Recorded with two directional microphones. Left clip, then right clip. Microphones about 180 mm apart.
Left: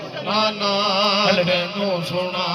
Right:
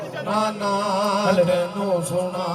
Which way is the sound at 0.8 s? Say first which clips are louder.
Left 3 dB; 60° right (ahead or behind).